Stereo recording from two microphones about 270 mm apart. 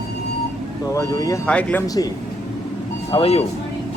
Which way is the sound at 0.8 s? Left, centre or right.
Centre.